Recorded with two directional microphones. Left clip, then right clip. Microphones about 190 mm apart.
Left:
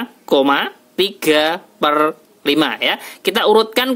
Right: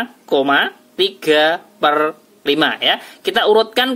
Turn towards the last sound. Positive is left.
turn(degrees=40)  # may be behind; listen again after turning